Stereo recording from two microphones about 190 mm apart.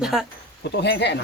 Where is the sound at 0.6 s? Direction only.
65° left (ahead or behind).